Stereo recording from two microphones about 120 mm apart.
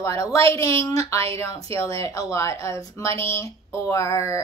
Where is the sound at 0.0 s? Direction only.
25° left (ahead or behind).